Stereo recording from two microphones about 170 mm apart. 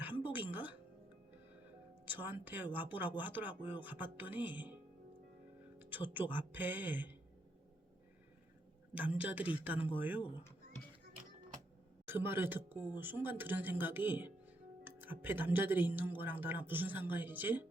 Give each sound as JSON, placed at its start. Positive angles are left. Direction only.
{"t": 0.0, "sound": "music", "side_deg": -10}
{"t": 2.0, "sound": "speech", "side_deg": -10}
{"t": 5.8, "sound": "speech", "side_deg": -10}
{"t": 9.0, "sound": "speech", "side_deg": -10}
{"t": 10.2, "sound": "speech", "side_deg": 30}
{"t": 12.0, "sound": "speech", "side_deg": -10}